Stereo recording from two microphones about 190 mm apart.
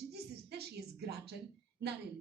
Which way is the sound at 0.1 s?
60° right (ahead or behind).